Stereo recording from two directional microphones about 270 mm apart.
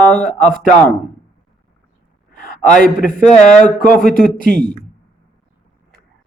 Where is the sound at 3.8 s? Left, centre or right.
Left.